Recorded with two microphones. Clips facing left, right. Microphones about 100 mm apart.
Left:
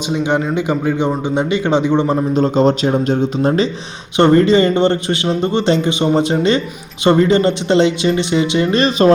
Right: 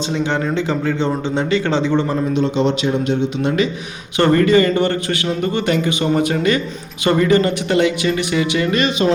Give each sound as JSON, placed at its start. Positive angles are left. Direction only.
{"t": 0.1, "sound": "a man's voice", "side_deg": 15}
{"t": 2.3, "sound": "speech", "side_deg": 40}
{"t": 4.2, "sound": "a man's voice", "side_deg": 25}